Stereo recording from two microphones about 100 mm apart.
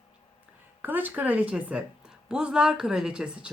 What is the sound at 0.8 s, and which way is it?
Speech, 20° right (ahead or behind).